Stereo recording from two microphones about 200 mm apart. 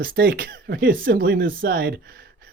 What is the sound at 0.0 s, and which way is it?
Speech, 45° right (ahead or behind).